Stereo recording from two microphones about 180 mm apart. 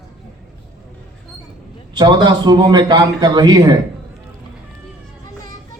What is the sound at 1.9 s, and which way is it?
A man's voice, 25° right (ahead or behind).